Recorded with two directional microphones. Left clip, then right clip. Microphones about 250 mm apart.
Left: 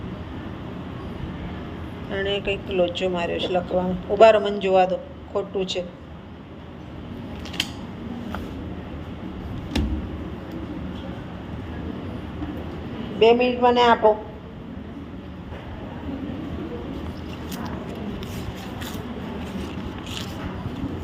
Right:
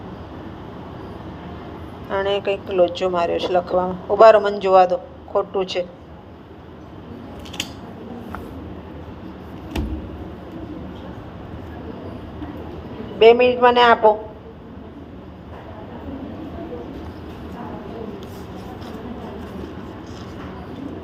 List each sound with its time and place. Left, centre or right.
2.0 s a woman's voice: right
13.1 s a woman's voice: right